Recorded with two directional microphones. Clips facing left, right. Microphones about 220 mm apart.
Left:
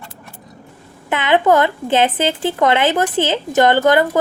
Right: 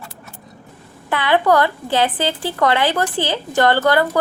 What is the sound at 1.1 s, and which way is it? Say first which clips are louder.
Speech: left 2 dB; 20° left (ahead or behind).